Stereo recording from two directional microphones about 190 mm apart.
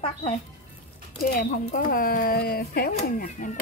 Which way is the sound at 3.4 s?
40° left (ahead or behind).